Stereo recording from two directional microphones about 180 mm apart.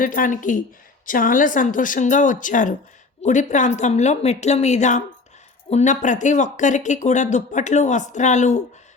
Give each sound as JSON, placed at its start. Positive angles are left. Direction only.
{"t": 0.0, "sound": "a woman's voice", "side_deg": 50}